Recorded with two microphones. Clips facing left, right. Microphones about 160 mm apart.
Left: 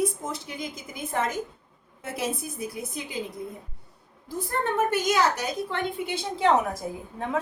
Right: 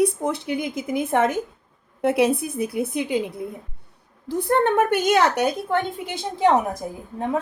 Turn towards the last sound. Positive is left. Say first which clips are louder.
# right 5 dB
turn(degrees=-20)  # may be behind; listen again after turning